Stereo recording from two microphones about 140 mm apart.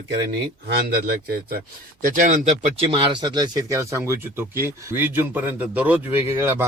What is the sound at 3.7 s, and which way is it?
A man's voice, 20° right (ahead or behind).